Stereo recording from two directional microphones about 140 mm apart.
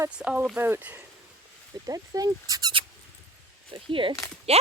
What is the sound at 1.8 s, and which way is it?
Speech, 25° right (ahead or behind).